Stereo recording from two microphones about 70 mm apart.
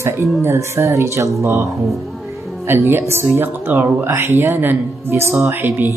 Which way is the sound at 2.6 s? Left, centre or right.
Right.